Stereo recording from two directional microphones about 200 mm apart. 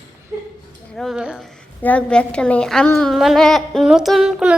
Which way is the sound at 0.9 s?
Centre (ahead or behind).